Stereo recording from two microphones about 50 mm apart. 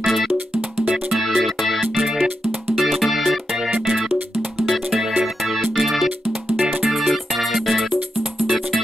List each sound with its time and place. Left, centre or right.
0.0 s music: centre
6.6 s music: right
6.9 s music: centre